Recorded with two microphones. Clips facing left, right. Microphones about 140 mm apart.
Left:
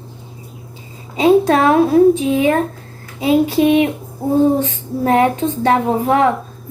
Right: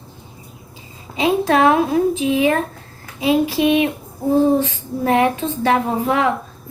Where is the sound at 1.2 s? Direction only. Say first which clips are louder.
Left 4 dB; 30° left (ahead or behind).